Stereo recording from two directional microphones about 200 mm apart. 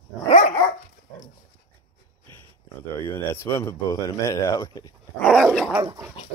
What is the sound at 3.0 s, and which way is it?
Speech, 10° left (ahead or behind).